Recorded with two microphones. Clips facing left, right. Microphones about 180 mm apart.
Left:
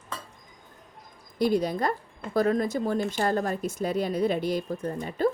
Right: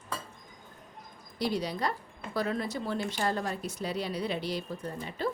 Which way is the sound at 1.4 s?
50° left (ahead or behind).